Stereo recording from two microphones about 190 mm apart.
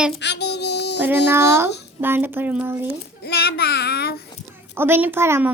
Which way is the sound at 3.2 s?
60° left (ahead or behind).